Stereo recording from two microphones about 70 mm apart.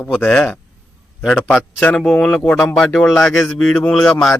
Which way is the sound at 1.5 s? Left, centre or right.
Centre.